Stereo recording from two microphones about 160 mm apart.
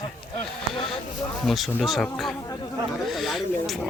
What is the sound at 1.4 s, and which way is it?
A man's voice, centre (ahead or behind).